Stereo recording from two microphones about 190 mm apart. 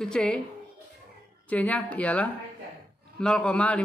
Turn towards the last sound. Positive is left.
turn(degrees=5)  # may be behind; listen again after turning